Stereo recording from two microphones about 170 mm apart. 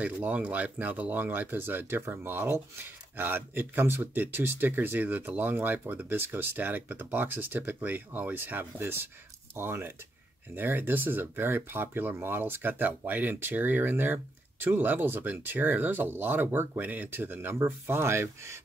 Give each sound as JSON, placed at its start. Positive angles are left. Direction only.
{"t": 0.0, "sound": "speech", "side_deg": -10}